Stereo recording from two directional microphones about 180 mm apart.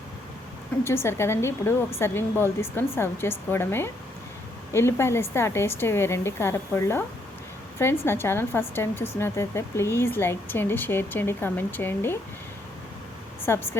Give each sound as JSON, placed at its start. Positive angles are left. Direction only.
{"t": 0.9, "sound": "speech", "side_deg": 15}
{"t": 13.4, "sound": "speech", "side_deg": 10}